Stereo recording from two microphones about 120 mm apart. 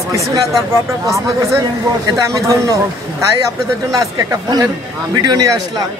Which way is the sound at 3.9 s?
30° right (ahead or behind).